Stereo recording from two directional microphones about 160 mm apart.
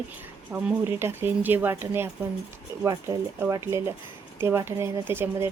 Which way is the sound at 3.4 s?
15° right (ahead or behind).